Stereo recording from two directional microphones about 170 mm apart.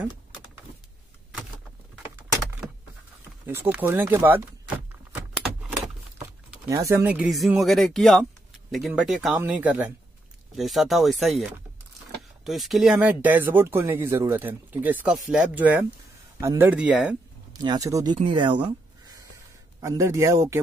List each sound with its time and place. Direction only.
3.4 s speech: 10° right (ahead or behind)
6.7 s speech: 20° right (ahead or behind)
17.5 s speech: 20° right (ahead or behind)
19.8 s speech: 20° right (ahead or behind)